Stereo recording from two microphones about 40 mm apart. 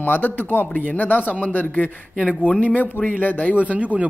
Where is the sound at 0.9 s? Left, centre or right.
Left.